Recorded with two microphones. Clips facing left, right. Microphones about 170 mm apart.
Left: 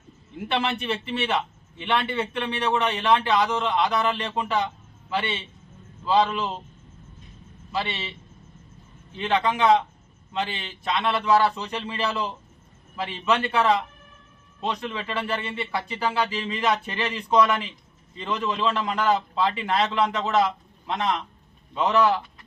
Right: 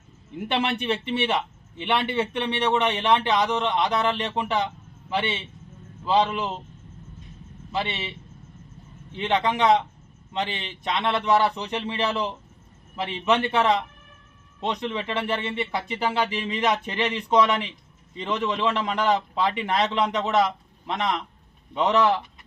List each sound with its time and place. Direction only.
0.5 s a man's voice: 20° right (ahead or behind)
7.7 s a man's voice: 20° right (ahead or behind)
9.1 s a man's voice: 20° right (ahead or behind)